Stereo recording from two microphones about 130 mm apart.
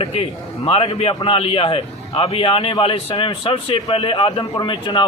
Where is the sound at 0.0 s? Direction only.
45° left (ahead or behind).